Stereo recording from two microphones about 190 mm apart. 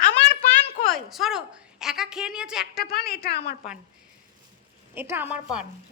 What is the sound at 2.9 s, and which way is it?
Speech, 55° left (ahead or behind).